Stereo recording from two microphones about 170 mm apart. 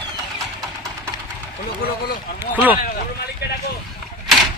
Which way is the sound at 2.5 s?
10° right (ahead or behind).